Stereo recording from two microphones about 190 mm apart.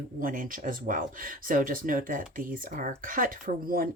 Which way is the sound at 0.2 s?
45° right (ahead or behind).